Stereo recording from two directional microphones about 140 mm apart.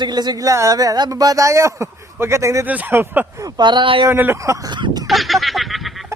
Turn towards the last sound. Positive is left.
turn(degrees=0)  # may be behind; listen again after turning